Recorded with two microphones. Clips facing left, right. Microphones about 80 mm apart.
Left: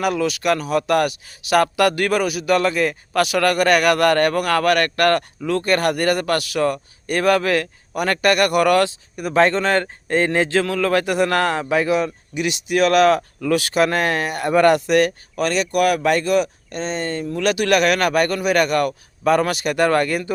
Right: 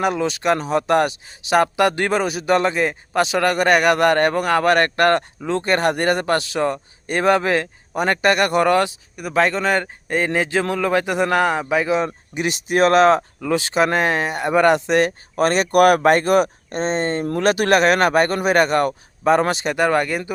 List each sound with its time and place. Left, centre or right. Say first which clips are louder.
0.0 s speech: even; right
9.1 s speech: left 2 dB; centre
10.5 s speech: left 1 dB; centre
11.9 s speech: even; right